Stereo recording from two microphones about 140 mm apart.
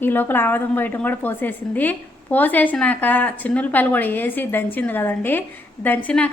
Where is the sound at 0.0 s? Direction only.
15° left (ahead or behind).